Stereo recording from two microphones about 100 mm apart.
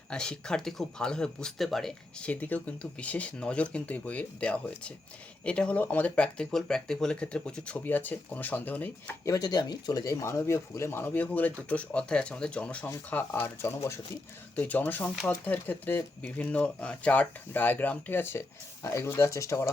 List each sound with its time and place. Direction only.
0.1 s speech: 10° left (ahead or behind)
2.2 s speech: 15° left (ahead or behind)
9.2 s speech: 40° left (ahead or behind)
14.5 s speech: 15° left (ahead or behind)